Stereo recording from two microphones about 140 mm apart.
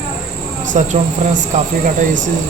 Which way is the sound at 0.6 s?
60° right (ahead or behind).